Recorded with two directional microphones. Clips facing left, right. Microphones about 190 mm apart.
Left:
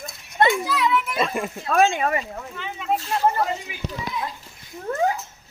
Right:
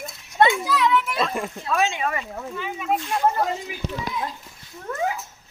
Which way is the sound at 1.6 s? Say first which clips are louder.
Left 5 dB; 50° left (ahead or behind).